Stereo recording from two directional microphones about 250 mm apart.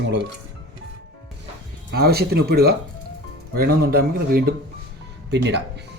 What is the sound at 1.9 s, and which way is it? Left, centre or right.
Speech, right.